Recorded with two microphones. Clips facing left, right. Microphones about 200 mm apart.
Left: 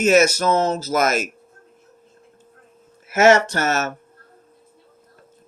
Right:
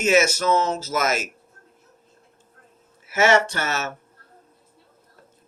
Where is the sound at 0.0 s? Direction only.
40° left (ahead or behind).